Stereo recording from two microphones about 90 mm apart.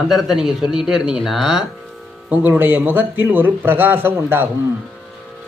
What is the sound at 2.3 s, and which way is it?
Speech, 20° right (ahead or behind).